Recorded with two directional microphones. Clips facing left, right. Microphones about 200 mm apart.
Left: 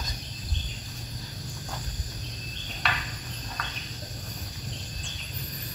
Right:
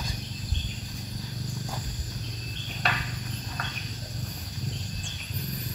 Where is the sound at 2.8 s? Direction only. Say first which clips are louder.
Right 2 dB; 45° right (ahead or behind).